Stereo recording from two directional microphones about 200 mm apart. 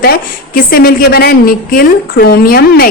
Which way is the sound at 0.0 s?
50° left (ahead or behind).